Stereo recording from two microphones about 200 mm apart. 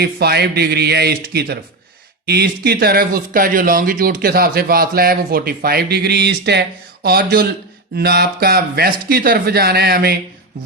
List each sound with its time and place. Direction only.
0.0 s speech: 55° right (ahead or behind)